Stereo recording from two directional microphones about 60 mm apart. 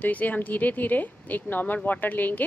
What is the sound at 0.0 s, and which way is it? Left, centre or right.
Speech, left.